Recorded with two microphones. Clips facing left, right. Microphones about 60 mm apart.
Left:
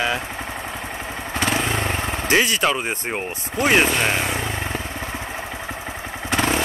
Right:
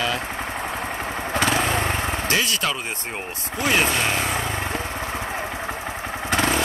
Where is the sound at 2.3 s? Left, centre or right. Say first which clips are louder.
Left 7 dB; left.